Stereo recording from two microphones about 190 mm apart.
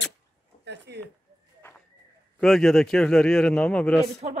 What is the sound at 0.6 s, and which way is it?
Speech, 65° right (ahead or behind).